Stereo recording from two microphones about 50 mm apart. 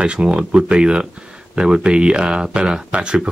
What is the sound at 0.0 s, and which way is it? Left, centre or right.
Speech, right.